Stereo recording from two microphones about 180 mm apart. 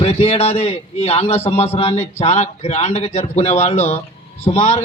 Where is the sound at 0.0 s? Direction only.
35° left (ahead or behind).